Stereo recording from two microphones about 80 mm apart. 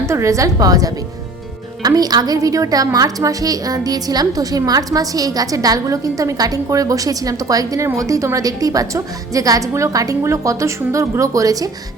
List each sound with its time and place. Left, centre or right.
0.0 s a woman's voice: right